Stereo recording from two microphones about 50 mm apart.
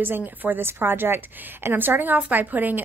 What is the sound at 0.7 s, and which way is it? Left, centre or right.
A woman's voice, right.